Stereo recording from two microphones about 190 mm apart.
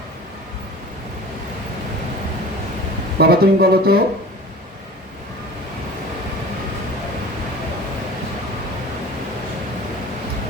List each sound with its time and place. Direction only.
3.2 s speech: 55° right (ahead or behind)